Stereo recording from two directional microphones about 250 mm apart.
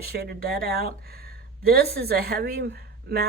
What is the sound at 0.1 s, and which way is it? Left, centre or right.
Speech, right.